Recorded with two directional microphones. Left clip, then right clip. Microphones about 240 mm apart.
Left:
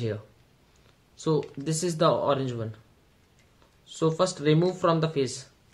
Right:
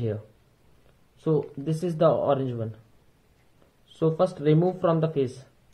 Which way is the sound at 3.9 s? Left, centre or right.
Left.